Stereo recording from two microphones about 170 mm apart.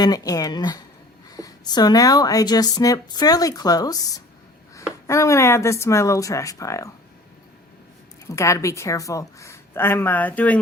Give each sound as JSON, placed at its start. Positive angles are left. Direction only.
{"t": 0.0, "sound": "a woman's voice", "side_deg": 20}
{"t": 8.3, "sound": "a woman's voice", "side_deg": 15}